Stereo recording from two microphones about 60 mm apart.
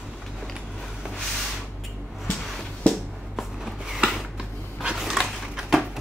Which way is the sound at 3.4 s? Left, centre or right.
Centre.